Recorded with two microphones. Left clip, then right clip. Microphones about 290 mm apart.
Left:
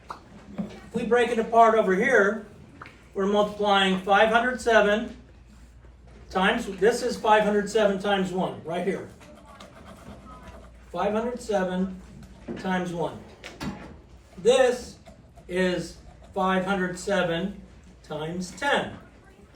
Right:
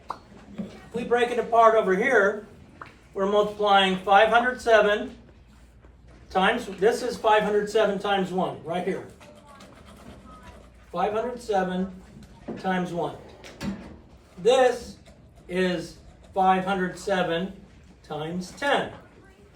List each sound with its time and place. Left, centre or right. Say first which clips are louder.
0.6 s a sound: left 2 dB; left
0.9 s speech: left 1 dB; centre
6.3 s speech: right 1 dB; centre
10.9 s speech: right 1 dB; centre
14.4 s a man's voice: even; centre